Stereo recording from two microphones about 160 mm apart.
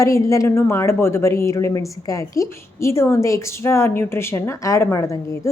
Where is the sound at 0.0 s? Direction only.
20° left (ahead or behind).